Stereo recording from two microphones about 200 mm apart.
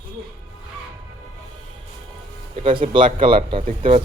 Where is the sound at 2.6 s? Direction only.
25° right (ahead or behind).